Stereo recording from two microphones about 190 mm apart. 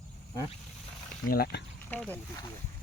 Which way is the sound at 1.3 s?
55° left (ahead or behind).